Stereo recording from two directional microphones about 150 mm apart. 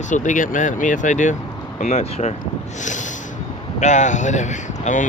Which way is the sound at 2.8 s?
55° left (ahead or behind).